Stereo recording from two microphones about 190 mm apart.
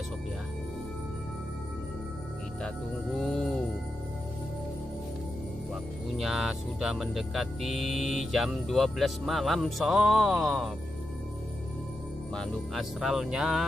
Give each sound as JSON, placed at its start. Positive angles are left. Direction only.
{"t": 6.1, "sound": "speech", "side_deg": 0}
{"t": 12.4, "sound": "speech", "side_deg": 0}